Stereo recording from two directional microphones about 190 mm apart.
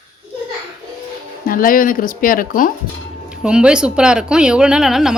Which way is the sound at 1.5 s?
50° left (ahead or behind).